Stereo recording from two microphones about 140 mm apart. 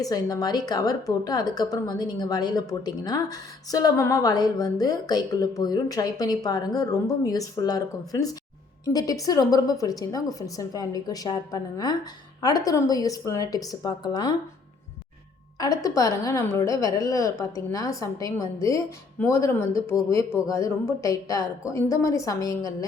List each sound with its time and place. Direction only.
0.0 s a woman's voice: 25° left (ahead or behind)
15.5 s a woman's voice: 25° left (ahead or behind)